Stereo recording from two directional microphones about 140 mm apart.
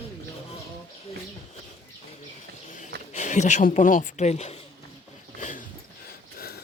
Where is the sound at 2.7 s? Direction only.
60° left (ahead or behind).